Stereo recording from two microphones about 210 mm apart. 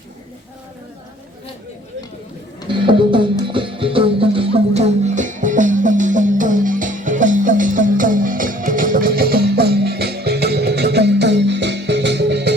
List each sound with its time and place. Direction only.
2.6 s music: 25° right (ahead or behind); by 12.5 s 55° right (ahead or behind)